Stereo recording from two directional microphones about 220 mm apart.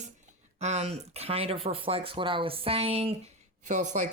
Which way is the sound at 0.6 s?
30° right (ahead or behind).